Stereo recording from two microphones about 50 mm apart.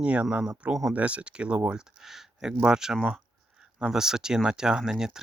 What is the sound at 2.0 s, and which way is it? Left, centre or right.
Speech, centre.